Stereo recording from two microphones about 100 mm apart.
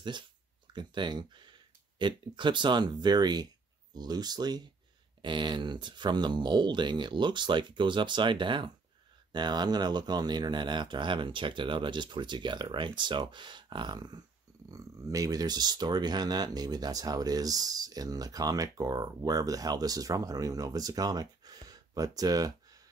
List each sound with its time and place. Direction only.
0.7 s speech: 50° right (ahead or behind)